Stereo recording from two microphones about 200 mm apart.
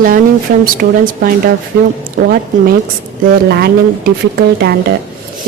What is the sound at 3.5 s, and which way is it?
A woman's voice, 55° right (ahead or behind).